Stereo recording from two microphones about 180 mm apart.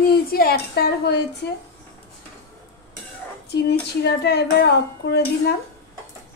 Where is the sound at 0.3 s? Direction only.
60° left (ahead or behind).